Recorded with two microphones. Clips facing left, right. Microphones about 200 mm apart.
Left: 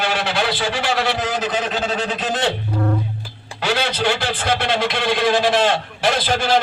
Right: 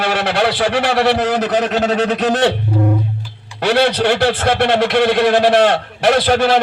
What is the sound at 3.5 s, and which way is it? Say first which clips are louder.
A man's voice: right 7 dB; 60° right (ahead or behind).